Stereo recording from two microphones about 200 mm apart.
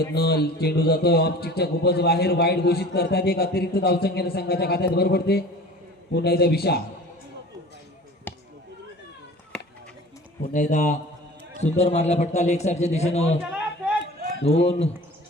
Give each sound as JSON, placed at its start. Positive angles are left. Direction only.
{"t": 0.1, "sound": "a man's voice", "side_deg": 50}
{"t": 8.3, "sound": "basketball bounce", "side_deg": 10}
{"t": 10.5, "sound": "a man's voice", "side_deg": 40}
{"t": 13.5, "sound": "a sound", "side_deg": -5}
{"t": 14.4, "sound": "a man's voice", "side_deg": 30}